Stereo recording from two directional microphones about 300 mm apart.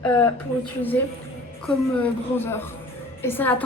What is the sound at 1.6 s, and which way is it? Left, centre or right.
A woman's voice, centre.